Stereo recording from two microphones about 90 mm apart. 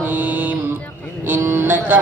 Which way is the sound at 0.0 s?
20° right (ahead or behind).